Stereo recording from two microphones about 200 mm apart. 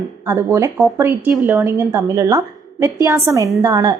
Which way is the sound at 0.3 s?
15° right (ahead or behind).